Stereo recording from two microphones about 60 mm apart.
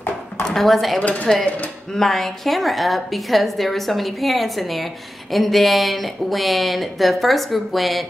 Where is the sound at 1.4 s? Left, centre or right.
Left.